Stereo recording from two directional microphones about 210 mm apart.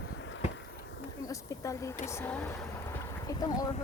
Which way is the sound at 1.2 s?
15° left (ahead or behind).